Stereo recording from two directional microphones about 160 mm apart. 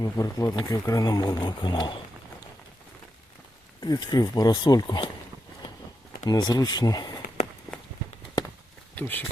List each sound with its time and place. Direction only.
0.0 s speech: 25° left (ahead or behind)
3.8 s speech: 25° left (ahead or behind)
6.2 s speech: 25° left (ahead or behind)
9.0 s speech: 10° left (ahead or behind)